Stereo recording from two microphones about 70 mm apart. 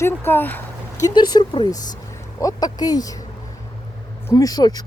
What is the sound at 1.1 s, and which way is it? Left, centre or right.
Speech, left.